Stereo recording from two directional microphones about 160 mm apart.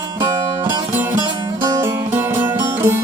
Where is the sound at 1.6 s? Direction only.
20° right (ahead or behind).